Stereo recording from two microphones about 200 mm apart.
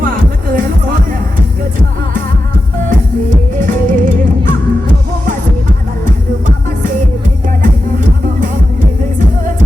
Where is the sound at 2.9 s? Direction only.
40° right (ahead or behind).